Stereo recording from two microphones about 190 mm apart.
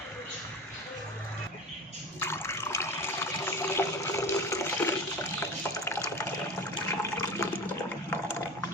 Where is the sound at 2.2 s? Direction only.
15° left (ahead or behind).